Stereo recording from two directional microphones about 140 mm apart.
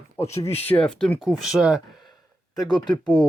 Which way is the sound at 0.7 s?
5° left (ahead or behind).